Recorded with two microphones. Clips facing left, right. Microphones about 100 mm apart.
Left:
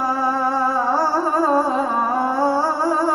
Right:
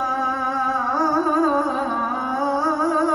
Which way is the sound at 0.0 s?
30° left (ahead or behind).